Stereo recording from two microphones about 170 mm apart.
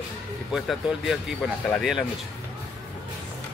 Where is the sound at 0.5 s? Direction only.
5° right (ahead or behind).